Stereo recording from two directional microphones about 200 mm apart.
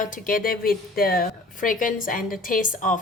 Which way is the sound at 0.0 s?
45° left (ahead or behind).